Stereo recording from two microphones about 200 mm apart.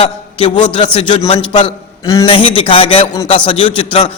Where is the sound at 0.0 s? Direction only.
30° left (ahead or behind).